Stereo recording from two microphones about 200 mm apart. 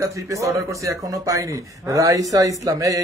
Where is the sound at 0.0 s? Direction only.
15° right (ahead or behind).